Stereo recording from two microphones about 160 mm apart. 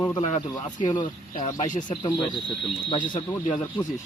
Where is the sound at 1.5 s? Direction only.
55° left (ahead or behind).